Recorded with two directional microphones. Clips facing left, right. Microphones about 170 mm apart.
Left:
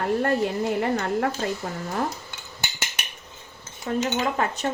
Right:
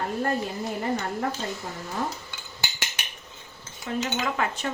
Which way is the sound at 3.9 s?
40° left (ahead or behind).